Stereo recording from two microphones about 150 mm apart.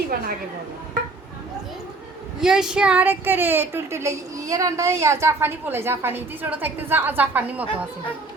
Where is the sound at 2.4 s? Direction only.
5° right (ahead or behind).